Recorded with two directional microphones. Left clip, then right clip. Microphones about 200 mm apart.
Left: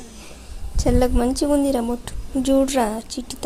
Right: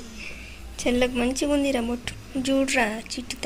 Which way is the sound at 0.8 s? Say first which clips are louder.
Left 4 dB; 25° left (ahead or behind).